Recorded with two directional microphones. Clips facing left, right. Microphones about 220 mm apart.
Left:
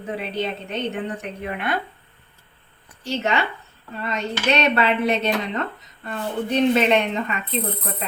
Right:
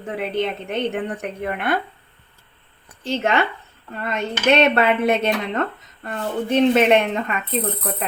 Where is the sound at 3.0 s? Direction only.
50° right (ahead or behind).